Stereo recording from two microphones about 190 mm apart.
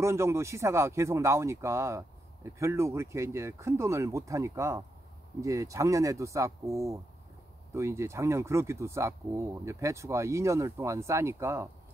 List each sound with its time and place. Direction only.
0.0 s speech: 15° right (ahead or behind)